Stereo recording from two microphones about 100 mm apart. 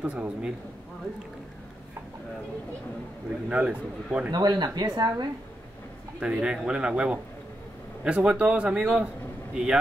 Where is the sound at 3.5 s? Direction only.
10° right (ahead or behind).